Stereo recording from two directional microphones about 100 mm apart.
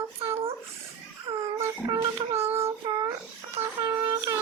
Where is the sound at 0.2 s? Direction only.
75° right (ahead or behind).